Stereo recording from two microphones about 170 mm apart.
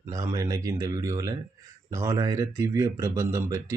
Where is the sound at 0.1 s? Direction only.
20° right (ahead or behind).